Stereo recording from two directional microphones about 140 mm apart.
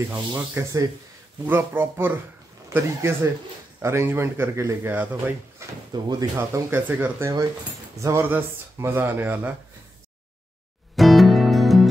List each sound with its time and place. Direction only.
0.3 s a man's voice: 25° right (ahead or behind)
5.6 s drawer open or close: 20° right (ahead or behind)
5.9 s a man's voice: 30° right (ahead or behind); by 9.5 s 15° right (ahead or behind)
11.0 s music: centre (ahead or behind)